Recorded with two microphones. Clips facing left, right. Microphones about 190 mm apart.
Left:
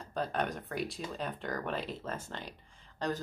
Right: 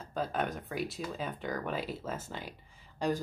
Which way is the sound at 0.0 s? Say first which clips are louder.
Even; centre (ahead or behind).